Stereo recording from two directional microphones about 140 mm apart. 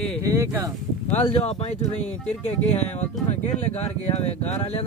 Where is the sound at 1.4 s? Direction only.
50° left (ahead or behind).